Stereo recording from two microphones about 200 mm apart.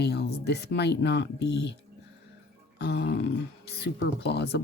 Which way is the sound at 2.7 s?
55° left (ahead or behind).